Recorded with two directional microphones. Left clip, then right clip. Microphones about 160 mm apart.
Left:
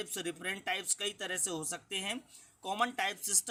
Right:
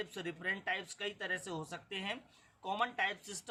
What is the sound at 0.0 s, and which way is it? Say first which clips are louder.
A man's voice: left 2 dB; 35° left (ahead or behind).